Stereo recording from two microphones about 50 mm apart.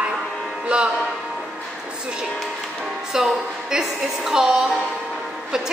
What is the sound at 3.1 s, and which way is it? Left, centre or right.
A woman's voice, centre.